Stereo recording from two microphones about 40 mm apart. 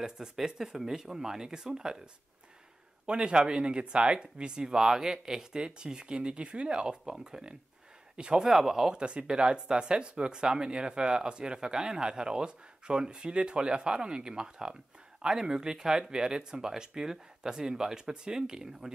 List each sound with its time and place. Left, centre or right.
0.0 s speech: centre
3.1 s speech: right
8.5 s speech: centre
9.0 s speech: right